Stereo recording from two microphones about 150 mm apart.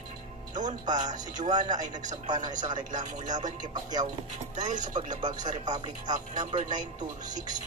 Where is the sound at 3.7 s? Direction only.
25° right (ahead or behind).